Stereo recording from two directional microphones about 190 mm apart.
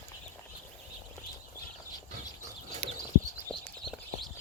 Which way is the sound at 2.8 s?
5° left (ahead or behind).